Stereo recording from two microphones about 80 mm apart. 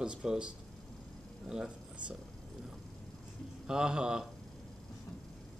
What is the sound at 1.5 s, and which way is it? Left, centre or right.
Speech, centre.